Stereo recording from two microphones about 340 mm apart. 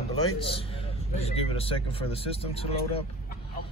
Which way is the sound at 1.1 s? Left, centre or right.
Centre.